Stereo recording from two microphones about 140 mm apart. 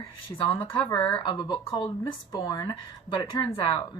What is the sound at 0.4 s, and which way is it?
Speech, 40° left (ahead or behind).